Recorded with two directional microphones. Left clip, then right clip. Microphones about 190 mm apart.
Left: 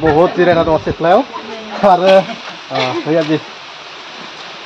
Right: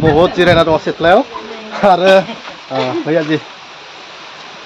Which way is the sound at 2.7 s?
30° right (ahead or behind).